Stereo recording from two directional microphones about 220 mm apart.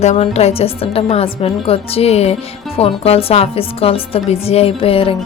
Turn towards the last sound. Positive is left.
turn(degrees=25)  # may be behind; listen again after turning